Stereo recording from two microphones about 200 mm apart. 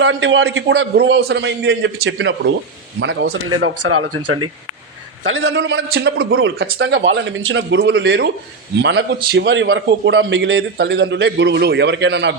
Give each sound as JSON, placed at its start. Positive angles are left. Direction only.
{"t": 0.0, "sound": "a man's voice", "side_deg": -65}
{"t": 0.9, "sound": "a man's voice", "side_deg": -60}
{"t": 5.2, "sound": "a man's voice", "side_deg": -80}